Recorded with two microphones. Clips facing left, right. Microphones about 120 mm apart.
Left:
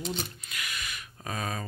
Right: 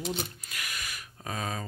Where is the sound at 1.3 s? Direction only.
25° right (ahead or behind).